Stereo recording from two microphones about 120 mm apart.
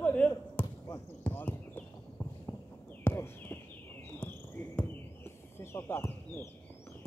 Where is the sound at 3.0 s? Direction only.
15° left (ahead or behind).